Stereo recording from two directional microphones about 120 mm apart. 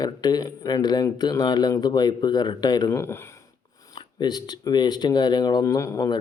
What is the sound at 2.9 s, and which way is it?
Speech, 20° left (ahead or behind).